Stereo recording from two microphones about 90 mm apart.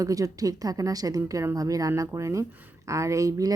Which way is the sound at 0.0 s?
40° right (ahead or behind).